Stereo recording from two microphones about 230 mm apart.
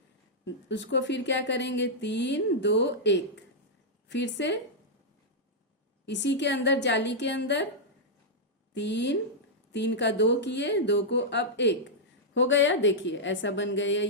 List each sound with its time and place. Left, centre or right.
0.4 s speech: left
6.1 s speech: left
8.7 s speech: left